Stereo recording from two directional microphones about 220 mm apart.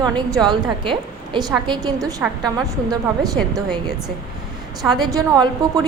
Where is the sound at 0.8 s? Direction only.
20° right (ahead or behind).